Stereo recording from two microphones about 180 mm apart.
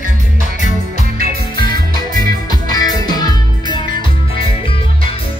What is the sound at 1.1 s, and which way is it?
Music, 55° right (ahead or behind).